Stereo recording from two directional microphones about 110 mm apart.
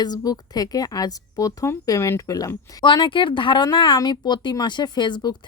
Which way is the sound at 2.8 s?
50° left (ahead or behind).